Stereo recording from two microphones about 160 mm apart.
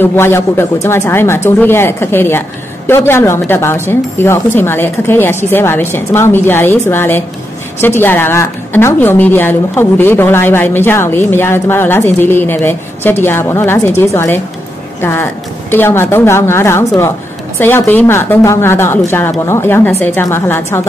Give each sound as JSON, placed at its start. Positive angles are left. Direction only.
{"t": 0.0, "sound": "a woman's voice", "side_deg": 15}